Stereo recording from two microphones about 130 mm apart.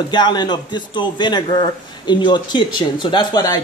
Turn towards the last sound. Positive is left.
turn(degrees=30)  # may be behind; listen again after turning